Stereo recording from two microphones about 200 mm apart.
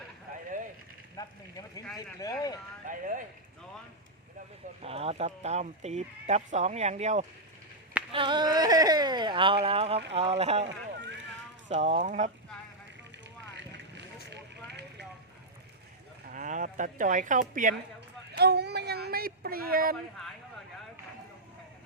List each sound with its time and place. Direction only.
1.1 s a sound: 20° left (ahead or behind)
2.0 s speech: 15° left (ahead or behind)
2.8 s speech: 40° right (ahead or behind)
4.8 s speech: 30° right (ahead or behind)
8.1 s speech: 25° right (ahead or behind)
11.7 s speech: 35° right (ahead or behind)
14.3 s vehicle: 60° right (ahead or behind)
16.2 s speech: 40° right (ahead or behind)
18.3 s a sound: 55° right (ahead or behind)